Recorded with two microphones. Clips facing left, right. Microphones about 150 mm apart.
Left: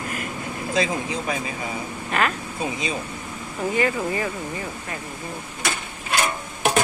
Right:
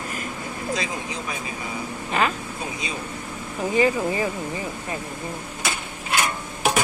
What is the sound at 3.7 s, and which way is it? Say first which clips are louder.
Speech: right 3 dB; 20° right (ahead or behind).